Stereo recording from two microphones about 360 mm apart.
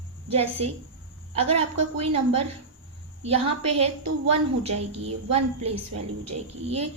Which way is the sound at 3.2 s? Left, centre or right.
Centre.